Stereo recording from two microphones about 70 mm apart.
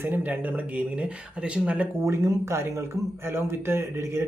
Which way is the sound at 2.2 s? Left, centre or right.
Right.